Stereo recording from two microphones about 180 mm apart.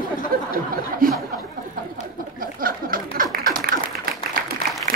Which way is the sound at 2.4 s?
50° right (ahead or behind).